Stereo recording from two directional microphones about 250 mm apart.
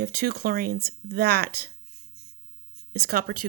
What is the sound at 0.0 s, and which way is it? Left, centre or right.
Speech, right.